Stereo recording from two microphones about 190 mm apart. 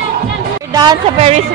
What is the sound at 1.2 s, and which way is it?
Speech, 35° right (ahead or behind).